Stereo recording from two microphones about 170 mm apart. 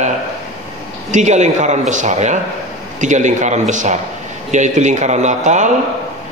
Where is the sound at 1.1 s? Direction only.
45° right (ahead or behind).